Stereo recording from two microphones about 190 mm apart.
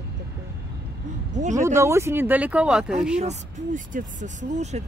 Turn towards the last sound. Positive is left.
turn(degrees=-40)  # may be behind; listen again after turning